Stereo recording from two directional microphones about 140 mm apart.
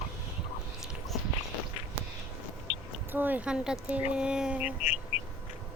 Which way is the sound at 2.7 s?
45° left (ahead or behind).